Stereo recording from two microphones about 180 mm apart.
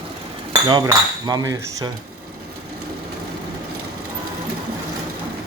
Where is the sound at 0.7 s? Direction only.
20° right (ahead or behind).